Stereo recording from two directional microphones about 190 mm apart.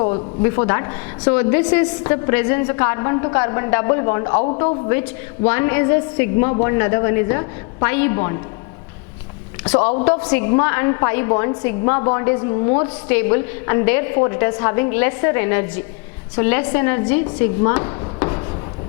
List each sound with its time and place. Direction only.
0.4 s a woman's voice: 20° left (ahead or behind)
5.5 s a woman's voice: 15° left (ahead or behind)
9.6 s a woman's voice: 10° left (ahead or behind)
17.6 s chopping: 15° left (ahead or behind)